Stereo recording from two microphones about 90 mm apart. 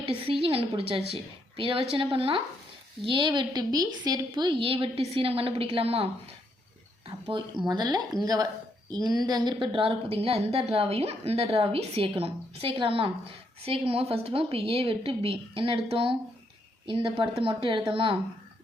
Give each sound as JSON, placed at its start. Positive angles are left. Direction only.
{"t": 0.3, "sound": "a woman's voice", "side_deg": -80}
{"t": 0.8, "sound": "a woman's voice", "side_deg": -90}
{"t": 3.0, "sound": "a woman's voice", "side_deg": -65}
{"t": 4.5, "sound": "a woman's voice", "side_deg": -90}
{"t": 7.3, "sound": "a woman's voice", "side_deg": -60}
{"t": 13.7, "sound": "a woman's voice", "side_deg": -90}
{"t": 16.8, "sound": "speech", "side_deg": -75}